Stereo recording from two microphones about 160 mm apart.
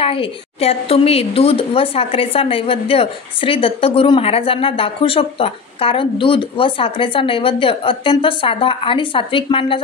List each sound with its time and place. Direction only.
0.0 s a woman's voice: 35° left (ahead or behind)